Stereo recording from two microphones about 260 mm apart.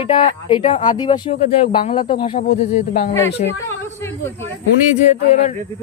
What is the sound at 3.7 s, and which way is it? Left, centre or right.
Speech, centre.